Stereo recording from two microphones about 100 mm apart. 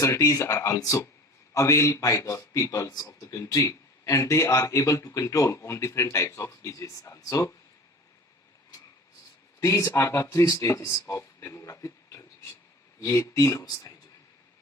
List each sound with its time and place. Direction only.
0.0 s a man's voice: 35° left (ahead or behind)
9.6 s a man's voice: 30° left (ahead or behind)